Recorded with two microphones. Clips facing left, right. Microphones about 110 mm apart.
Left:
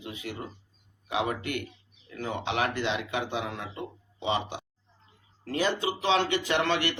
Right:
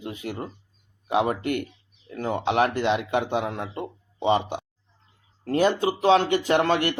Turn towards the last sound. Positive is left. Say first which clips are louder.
# right 5 dB
turn(degrees=-45)  # may be behind; listen again after turning